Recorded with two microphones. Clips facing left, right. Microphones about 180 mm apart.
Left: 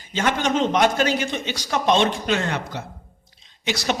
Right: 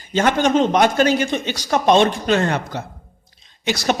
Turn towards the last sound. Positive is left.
turn(degrees=-50)  # may be behind; listen again after turning